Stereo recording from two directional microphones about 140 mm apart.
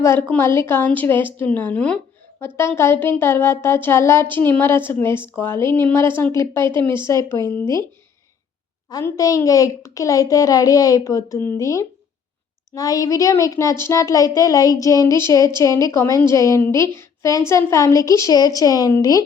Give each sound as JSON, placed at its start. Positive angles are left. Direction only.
{"t": 0.0, "sound": "a woman's voice", "side_deg": 15}
{"t": 9.0, "sound": "a woman's voice", "side_deg": 25}